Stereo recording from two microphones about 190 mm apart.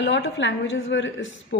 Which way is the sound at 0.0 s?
75° left (ahead or behind).